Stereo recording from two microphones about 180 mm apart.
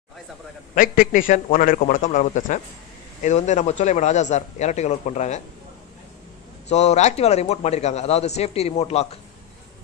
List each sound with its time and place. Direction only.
0.7 s a man's voice: 50° left (ahead or behind)
6.7 s a man's voice: 40° left (ahead or behind)